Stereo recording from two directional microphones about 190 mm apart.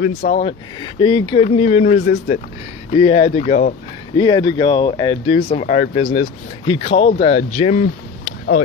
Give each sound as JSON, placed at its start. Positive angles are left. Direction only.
{"t": 0.0, "sound": "speech", "side_deg": 35}